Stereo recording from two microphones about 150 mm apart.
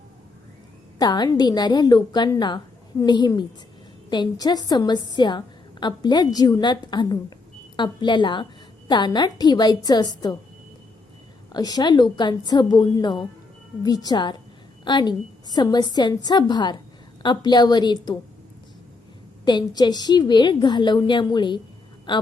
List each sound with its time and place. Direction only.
0.9 s a woman's voice: 25° left (ahead or behind)
11.5 s a woman's voice: 25° left (ahead or behind)
19.5 s a woman's voice: 30° left (ahead or behind)